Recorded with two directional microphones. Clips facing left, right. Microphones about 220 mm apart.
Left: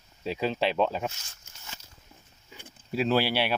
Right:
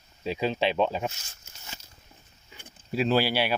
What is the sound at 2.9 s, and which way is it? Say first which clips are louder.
Speech: right 1 dB; centre (ahead or behind).